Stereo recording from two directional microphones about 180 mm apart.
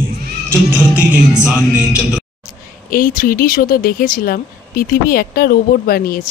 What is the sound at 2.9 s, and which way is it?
Speech, 50° left (ahead or behind).